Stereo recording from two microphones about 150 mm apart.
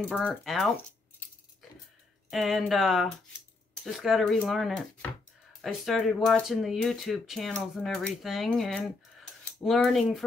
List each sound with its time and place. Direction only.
0.1 s speech: centre (ahead or behind)
2.3 s speech: centre (ahead or behind)